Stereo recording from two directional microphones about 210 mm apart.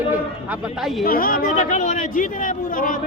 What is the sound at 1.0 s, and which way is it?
Speech, 45° left (ahead or behind).